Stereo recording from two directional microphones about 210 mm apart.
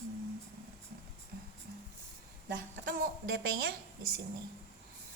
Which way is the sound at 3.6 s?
45° right (ahead or behind).